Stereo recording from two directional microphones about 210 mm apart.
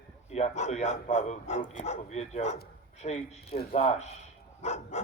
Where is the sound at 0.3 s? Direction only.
30° left (ahead or behind).